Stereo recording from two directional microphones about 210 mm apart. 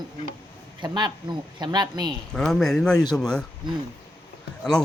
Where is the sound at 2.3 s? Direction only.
Centre (ahead or behind).